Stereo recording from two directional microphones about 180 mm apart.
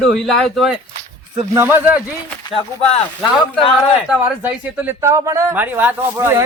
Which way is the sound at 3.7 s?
5° right (ahead or behind).